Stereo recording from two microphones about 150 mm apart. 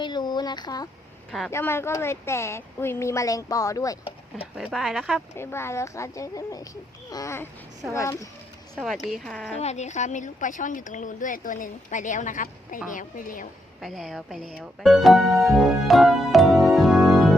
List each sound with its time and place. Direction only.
0.0 s a sound: 30° left (ahead or behind)
1.5 s a woman's voice: 15° left (ahead or behind)
4.5 s a woman's voice: centre (ahead or behind)
5.4 s a woman's voice: 15° left (ahead or behind)
8.7 s a woman's voice: centre (ahead or behind)
9.5 s speech: 45° left (ahead or behind)
13.8 s speech: centre (ahead or behind)